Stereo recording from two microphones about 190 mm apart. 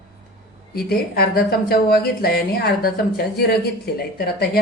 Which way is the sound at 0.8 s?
55° left (ahead or behind).